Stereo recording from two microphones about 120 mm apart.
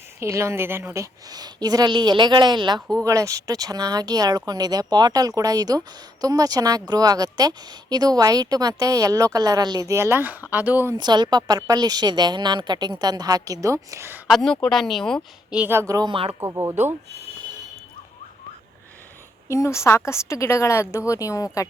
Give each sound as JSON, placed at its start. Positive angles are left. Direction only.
{"t": 0.2, "sound": "a woman's voice", "side_deg": -25}
{"t": 1.3, "sound": "a woman's voice", "side_deg": -35}
{"t": 10.9, "sound": "speech", "side_deg": -35}
{"t": 14.3, "sound": "speech", "side_deg": 0}
{"t": 15.4, "sound": "a woman's voice", "side_deg": -10}
{"t": 16.0, "sound": "speech", "side_deg": -40}
{"t": 16.4, "sound": "a woman's voice", "side_deg": -25}
{"t": 19.5, "sound": "a woman's voice", "side_deg": 25}